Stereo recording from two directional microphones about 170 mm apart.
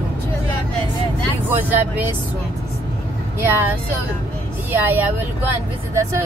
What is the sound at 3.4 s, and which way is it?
Speech, 10° right (ahead or behind).